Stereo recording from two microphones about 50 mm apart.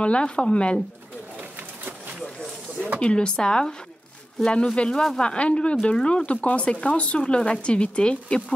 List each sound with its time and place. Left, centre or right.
0.0 s speech: left
1.6 s a sound: right
3.0 s speech: left